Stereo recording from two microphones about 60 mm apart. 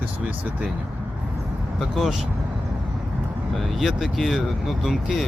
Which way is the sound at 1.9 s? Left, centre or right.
Centre.